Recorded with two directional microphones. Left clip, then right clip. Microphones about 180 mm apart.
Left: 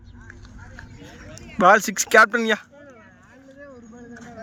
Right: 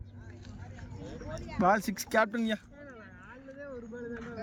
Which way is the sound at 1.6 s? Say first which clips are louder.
Left 12 dB; 60° left (ahead or behind).